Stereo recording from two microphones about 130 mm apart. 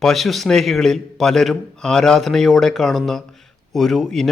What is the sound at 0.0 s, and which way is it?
A man's voice, centre (ahead or behind).